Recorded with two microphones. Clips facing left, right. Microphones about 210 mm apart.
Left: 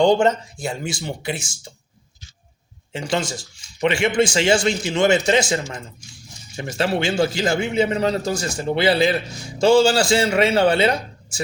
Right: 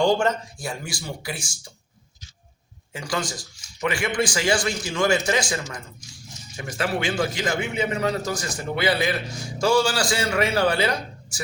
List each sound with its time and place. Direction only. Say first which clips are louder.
0.0 s a man's voice: left 5 dB; 20° left (ahead or behind)
2.9 s a man's voice: left 5 dB; 25° left (ahead or behind)